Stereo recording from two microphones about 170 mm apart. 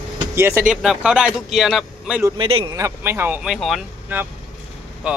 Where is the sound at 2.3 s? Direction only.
30° right (ahead or behind).